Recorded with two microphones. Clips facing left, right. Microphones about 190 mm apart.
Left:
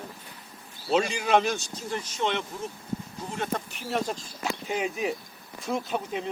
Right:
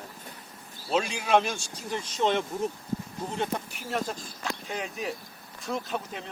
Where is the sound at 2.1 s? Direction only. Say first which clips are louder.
Right 3 dB; 40° right (ahead or behind).